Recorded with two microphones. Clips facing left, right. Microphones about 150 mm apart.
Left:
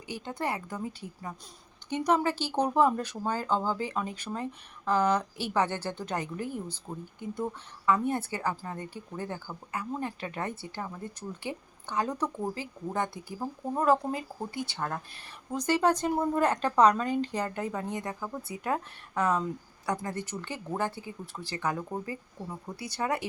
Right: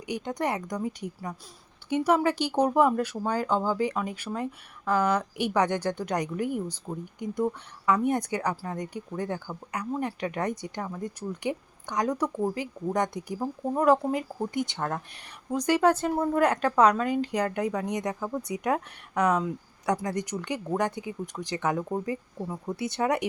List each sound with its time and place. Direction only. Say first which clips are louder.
0.1 s speech: right 4 dB; 15° right (ahead or behind)